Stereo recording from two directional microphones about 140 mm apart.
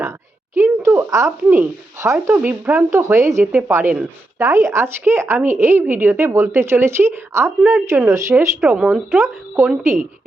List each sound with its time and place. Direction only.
0.5 s speech: 20° right (ahead or behind)
8.7 s speech: 10° right (ahead or behind)